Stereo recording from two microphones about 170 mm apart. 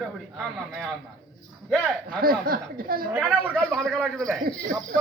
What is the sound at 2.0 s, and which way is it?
Speech, 60° right (ahead or behind).